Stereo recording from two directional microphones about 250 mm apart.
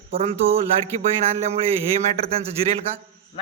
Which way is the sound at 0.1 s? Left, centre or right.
Right.